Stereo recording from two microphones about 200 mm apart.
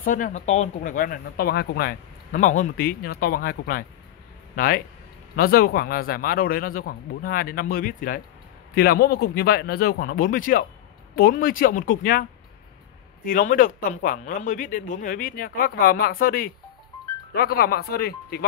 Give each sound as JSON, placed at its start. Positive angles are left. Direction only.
{"t": 0.0, "sound": "speech", "side_deg": 40}